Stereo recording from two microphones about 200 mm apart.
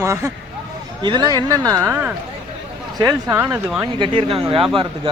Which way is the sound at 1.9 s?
10° right (ahead or behind).